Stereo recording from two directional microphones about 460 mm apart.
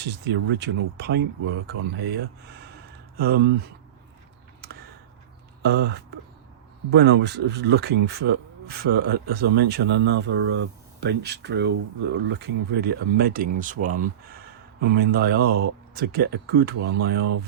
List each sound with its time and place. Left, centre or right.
0.0 s speech: right
5.6 s speech: centre